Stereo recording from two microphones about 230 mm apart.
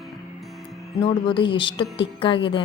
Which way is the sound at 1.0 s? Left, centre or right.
Left.